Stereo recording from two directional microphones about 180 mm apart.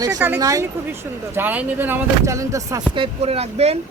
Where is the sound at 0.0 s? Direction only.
15° right (ahead or behind).